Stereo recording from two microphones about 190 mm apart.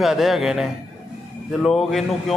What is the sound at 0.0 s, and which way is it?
A man's voice, centre (ahead or behind).